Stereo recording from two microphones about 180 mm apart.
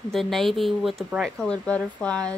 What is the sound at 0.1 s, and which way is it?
Speech, centre (ahead or behind).